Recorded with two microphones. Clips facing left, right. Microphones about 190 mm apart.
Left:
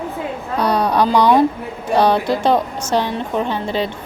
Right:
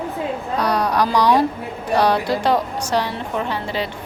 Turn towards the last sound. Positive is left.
turn(degrees=25)  # may be behind; listen again after turning